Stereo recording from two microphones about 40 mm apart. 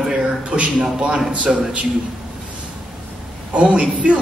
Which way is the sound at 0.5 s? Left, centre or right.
Right.